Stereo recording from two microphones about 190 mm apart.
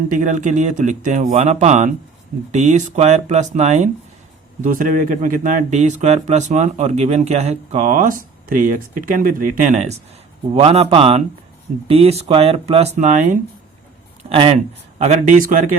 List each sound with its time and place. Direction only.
0.1 s speech: 40° right (ahead or behind)
14.3 s speech: 30° right (ahead or behind)